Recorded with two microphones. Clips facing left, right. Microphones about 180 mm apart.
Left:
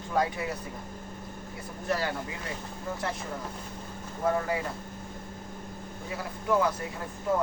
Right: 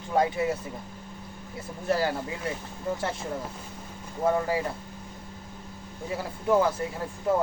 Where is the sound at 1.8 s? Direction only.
30° right (ahead or behind).